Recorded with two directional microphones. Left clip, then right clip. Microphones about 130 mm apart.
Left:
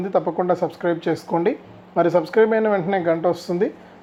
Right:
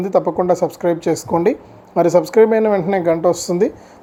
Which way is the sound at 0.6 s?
20° right (ahead or behind).